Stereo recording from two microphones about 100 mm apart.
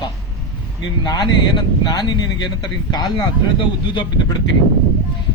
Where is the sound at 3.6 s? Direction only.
50° left (ahead or behind).